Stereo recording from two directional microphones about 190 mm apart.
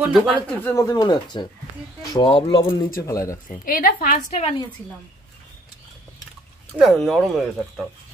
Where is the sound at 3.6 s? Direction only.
45° left (ahead or behind).